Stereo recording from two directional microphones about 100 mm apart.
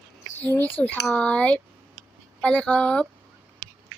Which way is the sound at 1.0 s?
10° left (ahead or behind).